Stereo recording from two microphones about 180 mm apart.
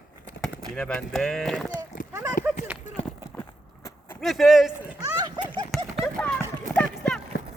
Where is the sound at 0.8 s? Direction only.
5° left (ahead or behind).